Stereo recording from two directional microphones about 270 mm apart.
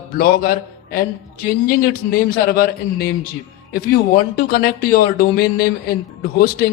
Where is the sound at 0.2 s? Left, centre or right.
Left.